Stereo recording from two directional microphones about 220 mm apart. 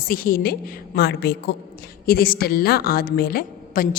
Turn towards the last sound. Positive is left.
turn(degrees=45)  # may be behind; listen again after turning